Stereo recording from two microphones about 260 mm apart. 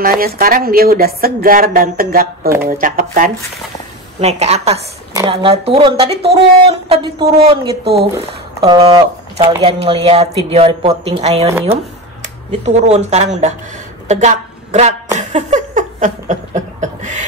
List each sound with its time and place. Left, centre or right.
0.0 s speech: right
9.4 s speech: centre
9.8 s a woman's voice: right
15.1 s a sound: right